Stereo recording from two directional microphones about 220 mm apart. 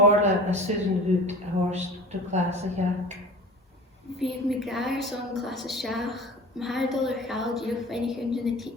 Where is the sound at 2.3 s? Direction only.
30° right (ahead or behind).